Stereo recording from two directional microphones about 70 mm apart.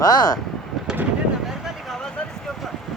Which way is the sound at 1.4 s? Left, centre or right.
Centre.